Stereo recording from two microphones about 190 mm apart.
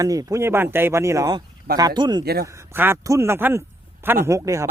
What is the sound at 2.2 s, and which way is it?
Speech, 55° right (ahead or behind).